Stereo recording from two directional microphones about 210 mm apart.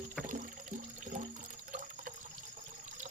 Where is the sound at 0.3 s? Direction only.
35° right (ahead or behind).